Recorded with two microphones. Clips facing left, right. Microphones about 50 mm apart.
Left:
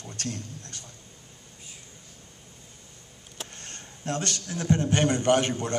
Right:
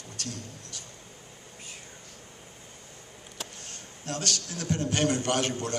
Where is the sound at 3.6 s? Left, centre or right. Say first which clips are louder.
Left 4 dB; left.